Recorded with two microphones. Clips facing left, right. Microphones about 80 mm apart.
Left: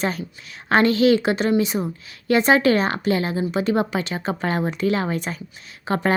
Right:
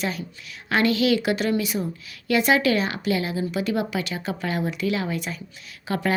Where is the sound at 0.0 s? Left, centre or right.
Left.